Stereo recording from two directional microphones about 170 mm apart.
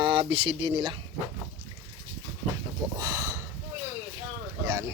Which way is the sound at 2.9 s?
20° right (ahead or behind).